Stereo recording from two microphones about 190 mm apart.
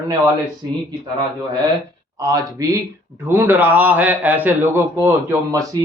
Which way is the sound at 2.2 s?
20° right (ahead or behind).